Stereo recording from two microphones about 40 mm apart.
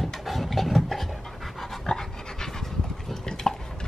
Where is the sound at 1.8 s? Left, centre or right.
Centre.